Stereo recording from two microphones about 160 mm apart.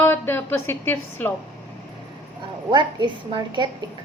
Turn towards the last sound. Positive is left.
turn(degrees=-30)  # may be behind; listen again after turning